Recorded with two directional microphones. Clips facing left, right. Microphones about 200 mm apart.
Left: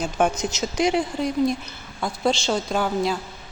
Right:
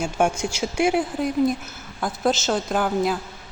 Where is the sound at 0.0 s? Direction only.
10° right (ahead or behind).